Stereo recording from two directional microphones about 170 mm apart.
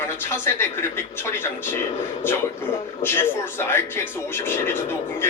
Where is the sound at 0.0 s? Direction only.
15° left (ahead or behind).